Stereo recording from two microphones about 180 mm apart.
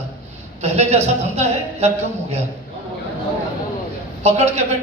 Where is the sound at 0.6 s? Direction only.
35° right (ahead or behind).